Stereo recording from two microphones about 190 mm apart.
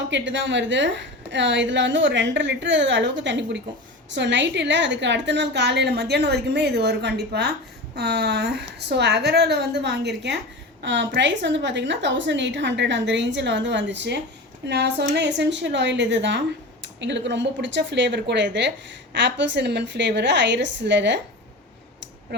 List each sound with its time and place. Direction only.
0.1 s a woman's voice: 70° right (ahead or behind)